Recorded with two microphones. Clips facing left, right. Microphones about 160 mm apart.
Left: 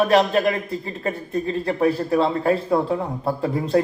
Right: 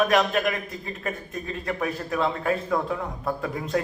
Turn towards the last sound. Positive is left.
turn(degrees=30)  # may be behind; listen again after turning